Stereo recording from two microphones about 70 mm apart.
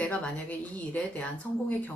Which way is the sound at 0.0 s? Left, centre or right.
Centre.